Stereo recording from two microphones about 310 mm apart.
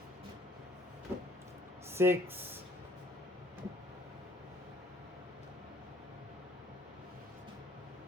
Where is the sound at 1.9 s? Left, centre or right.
Centre.